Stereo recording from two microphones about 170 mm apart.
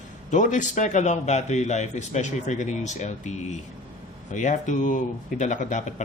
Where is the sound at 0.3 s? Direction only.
50° left (ahead or behind).